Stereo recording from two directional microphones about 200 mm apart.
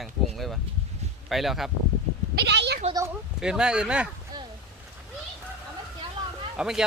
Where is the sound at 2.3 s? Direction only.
60° right (ahead or behind).